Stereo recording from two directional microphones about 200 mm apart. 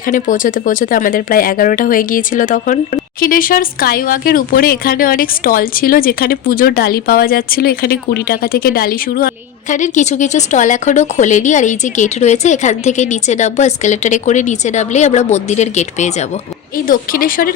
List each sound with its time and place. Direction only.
0.1 s speech: 40° left (ahead or behind)